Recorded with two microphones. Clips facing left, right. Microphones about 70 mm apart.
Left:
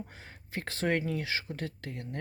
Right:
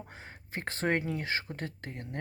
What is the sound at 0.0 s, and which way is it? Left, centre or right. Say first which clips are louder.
Speech: left 1 dB; right.